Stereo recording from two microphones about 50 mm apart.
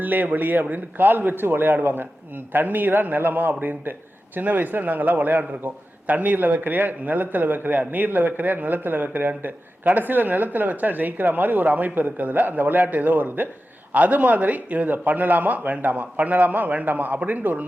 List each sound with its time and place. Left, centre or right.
0.0 s a man's voice: right